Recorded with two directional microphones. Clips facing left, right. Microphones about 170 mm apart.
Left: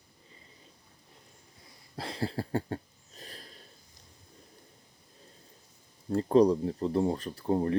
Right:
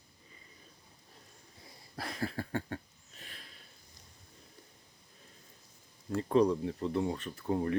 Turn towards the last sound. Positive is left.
turn(degrees=35)  # may be behind; listen again after turning